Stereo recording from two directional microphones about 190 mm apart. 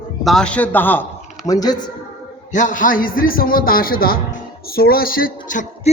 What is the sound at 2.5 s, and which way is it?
A man's voice, 40° left (ahead or behind).